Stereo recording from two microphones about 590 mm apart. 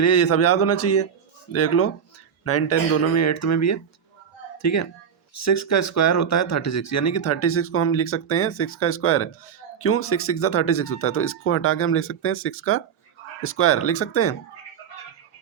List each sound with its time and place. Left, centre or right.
0.0 s speech: left